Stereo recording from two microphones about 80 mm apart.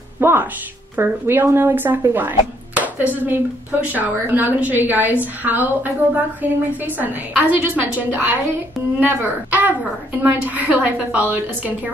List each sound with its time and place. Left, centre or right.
0.2 s a woman's voice: right